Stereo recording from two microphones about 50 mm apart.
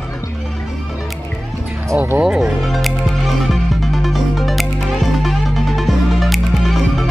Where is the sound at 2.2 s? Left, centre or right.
Centre.